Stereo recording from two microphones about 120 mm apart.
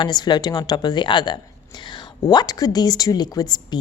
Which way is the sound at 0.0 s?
35° left (ahead or behind).